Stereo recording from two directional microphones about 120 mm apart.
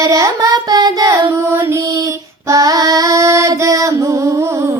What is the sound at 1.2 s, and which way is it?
Female singing, 20° right (ahead or behind).